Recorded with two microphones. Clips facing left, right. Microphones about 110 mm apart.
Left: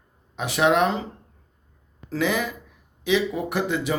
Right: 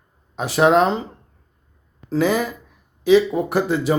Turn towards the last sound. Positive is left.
turn(degrees=-35)  # may be behind; listen again after turning